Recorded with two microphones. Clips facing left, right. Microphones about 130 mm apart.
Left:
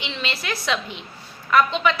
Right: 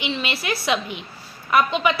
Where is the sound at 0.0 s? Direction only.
10° right (ahead or behind).